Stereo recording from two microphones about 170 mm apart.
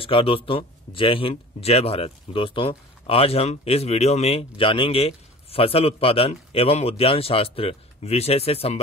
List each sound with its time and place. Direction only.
0.0 s speech: 30° left (ahead or behind)